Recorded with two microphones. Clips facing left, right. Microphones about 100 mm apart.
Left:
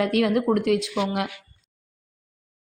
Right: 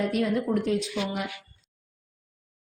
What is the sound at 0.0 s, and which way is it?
Speech, 85° left.